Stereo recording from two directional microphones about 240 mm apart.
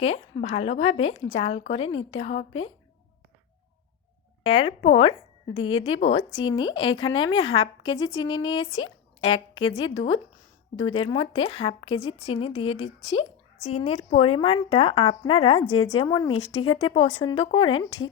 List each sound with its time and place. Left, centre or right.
0.0 s speech: left
4.5 s speech: left
5.5 s speech: left
6.4 s speech: centre
8.7 s speech: left
10.8 s speech: left